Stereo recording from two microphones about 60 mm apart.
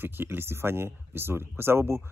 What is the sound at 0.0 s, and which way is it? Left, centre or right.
Speech, right.